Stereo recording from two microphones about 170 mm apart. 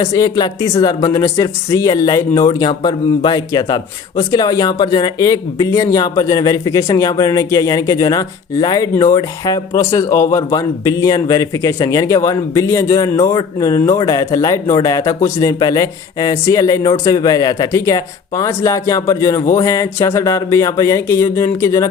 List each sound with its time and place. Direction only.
0.0 s speech: 20° left (ahead or behind)